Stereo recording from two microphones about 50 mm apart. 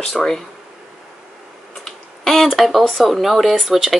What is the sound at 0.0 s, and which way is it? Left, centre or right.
Speech, centre.